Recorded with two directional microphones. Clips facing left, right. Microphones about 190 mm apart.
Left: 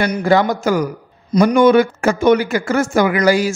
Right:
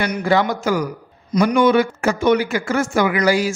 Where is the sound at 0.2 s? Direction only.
45° left (ahead or behind).